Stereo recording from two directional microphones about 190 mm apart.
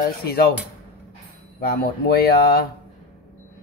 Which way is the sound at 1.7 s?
55° left (ahead or behind).